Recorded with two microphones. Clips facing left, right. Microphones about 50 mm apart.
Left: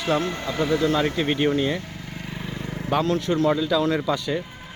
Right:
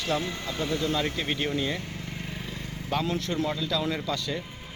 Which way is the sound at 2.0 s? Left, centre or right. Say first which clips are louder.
Left 2 dB; centre.